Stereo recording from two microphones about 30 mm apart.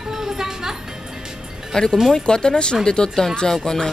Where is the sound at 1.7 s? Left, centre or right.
Left.